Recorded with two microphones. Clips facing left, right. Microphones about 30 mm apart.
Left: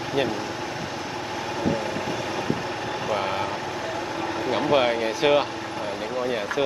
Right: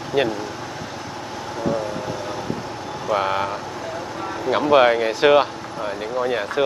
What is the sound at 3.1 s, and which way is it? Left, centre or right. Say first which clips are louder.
Speech: right 4 dB; centre.